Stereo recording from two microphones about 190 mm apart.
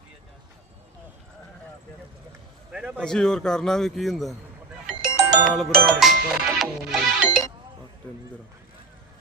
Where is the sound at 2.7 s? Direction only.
5° right (ahead or behind).